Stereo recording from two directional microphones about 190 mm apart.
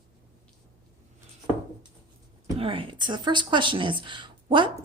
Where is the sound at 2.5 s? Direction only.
30° right (ahead or behind).